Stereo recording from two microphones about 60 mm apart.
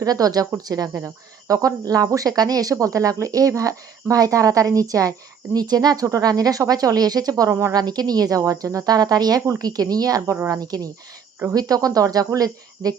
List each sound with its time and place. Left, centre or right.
0.0 s speech: right
2.7 s speech: right
5.5 s speech: right